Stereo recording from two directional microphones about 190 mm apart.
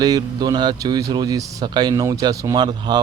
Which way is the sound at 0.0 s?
20° right (ahead or behind).